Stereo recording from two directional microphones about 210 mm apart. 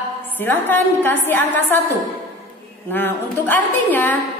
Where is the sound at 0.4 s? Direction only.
10° left (ahead or behind).